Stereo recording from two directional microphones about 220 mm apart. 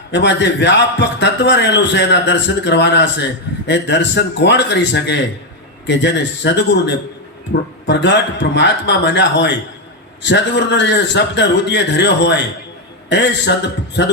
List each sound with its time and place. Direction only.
0.1 s a man's voice: 50° left (ahead or behind)